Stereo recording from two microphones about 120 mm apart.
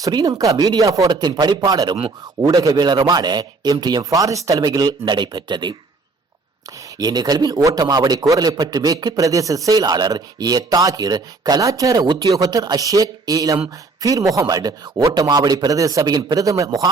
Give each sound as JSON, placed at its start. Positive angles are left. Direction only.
{"t": 0.0, "sound": "a man's voice", "side_deg": -30}
{"t": 7.0, "sound": "a man's voice", "side_deg": -35}